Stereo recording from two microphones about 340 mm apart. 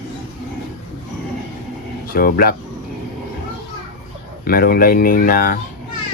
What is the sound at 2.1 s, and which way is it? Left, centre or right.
Speech, left.